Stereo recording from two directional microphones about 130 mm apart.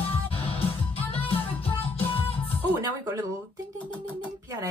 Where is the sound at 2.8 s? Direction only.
25° right (ahead or behind).